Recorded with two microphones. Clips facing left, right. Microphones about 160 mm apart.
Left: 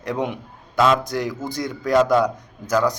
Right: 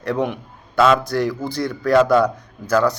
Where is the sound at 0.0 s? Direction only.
15° left (ahead or behind).